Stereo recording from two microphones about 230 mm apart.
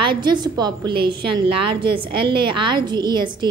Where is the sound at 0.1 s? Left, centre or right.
Centre.